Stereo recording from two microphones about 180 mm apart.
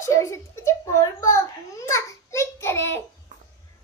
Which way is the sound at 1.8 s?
15° left (ahead or behind).